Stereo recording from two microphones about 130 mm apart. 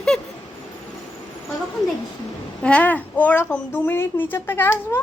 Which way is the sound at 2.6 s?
10° left (ahead or behind).